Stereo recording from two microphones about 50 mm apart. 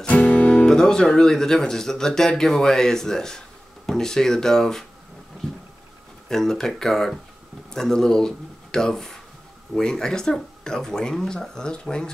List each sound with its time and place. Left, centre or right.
0.0 s music: left
0.7 s speech: centre
6.2 s speech: centre